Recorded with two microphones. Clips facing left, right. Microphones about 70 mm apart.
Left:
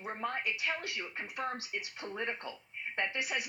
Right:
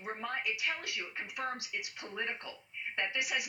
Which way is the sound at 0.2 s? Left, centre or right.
Left.